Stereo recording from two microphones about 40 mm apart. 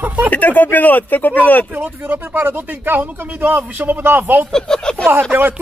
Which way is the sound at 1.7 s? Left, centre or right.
Right.